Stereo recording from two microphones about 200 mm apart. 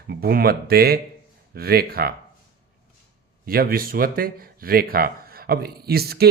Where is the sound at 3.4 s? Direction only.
50° right (ahead or behind).